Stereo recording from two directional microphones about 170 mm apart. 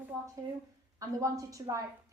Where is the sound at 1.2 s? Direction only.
20° right (ahead or behind).